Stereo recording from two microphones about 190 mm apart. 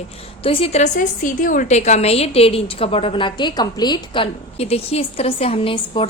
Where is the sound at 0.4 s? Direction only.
30° left (ahead or behind).